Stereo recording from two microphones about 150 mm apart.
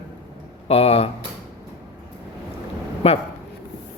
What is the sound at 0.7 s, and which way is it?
Speech, 40° left (ahead or behind).